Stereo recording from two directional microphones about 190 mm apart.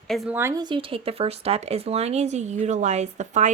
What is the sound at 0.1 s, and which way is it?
Speech, 10° right (ahead or behind).